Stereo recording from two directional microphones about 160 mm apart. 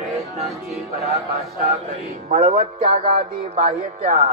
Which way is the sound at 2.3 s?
65° right (ahead or behind).